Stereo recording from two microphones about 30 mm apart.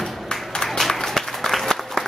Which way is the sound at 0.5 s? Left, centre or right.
Centre.